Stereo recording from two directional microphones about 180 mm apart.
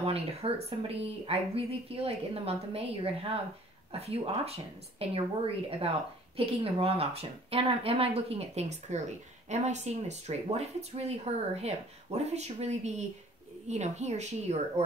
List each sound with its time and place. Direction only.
0.0 s speech: 35° right (ahead or behind)